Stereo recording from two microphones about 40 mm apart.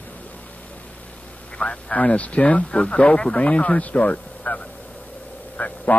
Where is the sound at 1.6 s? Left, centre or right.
Left.